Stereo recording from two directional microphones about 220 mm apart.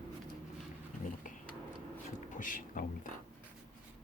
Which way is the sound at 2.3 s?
35° left (ahead or behind).